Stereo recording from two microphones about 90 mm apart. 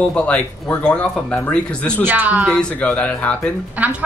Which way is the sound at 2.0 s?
20° right (ahead or behind).